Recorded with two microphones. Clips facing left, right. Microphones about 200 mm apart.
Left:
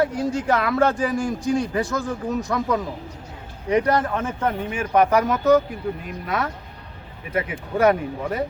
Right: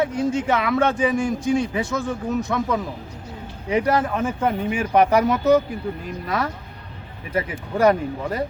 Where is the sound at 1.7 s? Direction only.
Centre (ahead or behind).